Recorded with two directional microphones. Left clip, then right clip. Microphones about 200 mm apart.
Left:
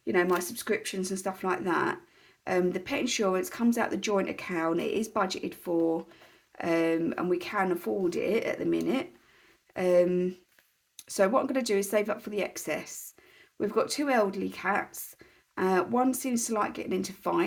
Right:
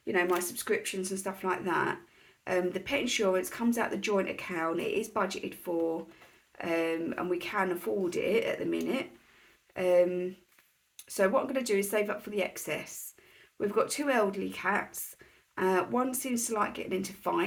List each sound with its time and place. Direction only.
0.0 s speech: 45° left (ahead or behind)